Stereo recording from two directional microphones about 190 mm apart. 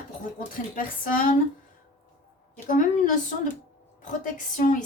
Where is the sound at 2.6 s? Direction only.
45° left (ahead or behind).